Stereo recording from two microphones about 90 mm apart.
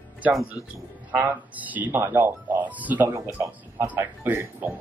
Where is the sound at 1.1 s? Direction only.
20° right (ahead or behind).